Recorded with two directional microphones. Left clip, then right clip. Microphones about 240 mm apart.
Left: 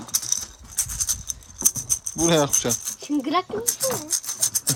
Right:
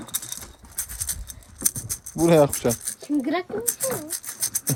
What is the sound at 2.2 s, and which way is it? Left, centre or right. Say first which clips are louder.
Speech: right 3 dB; centre.